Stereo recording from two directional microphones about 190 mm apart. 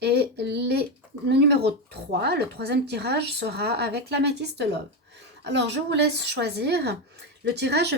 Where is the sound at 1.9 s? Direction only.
60° right (ahead or behind).